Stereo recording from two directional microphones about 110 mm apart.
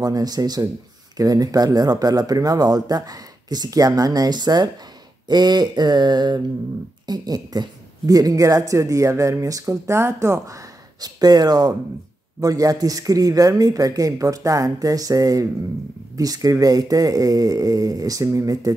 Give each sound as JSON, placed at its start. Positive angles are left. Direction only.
{"t": 0.0, "sound": "a woman's voice", "side_deg": -35}